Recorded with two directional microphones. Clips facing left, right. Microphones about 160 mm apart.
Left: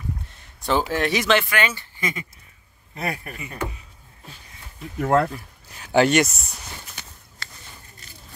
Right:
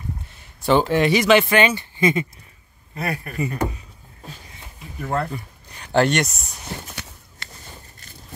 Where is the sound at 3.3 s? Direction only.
35° right (ahead or behind).